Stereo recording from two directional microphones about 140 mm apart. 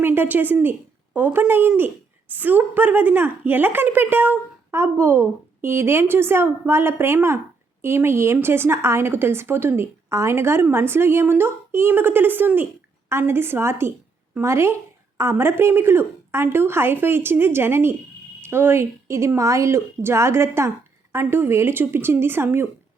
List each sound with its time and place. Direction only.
0.0 s a woman's voice: 15° right (ahead or behind)